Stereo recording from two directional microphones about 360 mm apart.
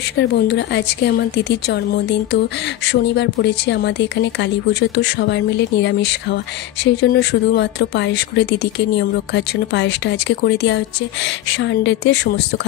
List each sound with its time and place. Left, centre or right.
0.2 s speech: left